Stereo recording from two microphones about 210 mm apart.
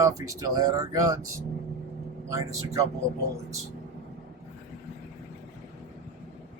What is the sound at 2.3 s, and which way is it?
Speech, 15° right (ahead or behind).